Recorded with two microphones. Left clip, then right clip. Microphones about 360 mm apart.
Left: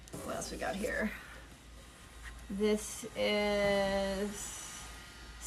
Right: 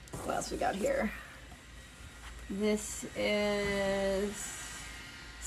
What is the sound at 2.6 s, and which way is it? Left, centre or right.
Speech, centre.